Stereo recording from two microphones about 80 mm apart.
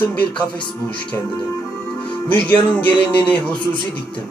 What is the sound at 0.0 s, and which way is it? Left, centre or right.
Speech, centre.